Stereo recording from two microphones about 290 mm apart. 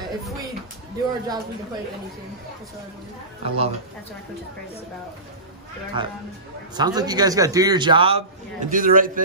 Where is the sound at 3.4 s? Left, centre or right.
Right.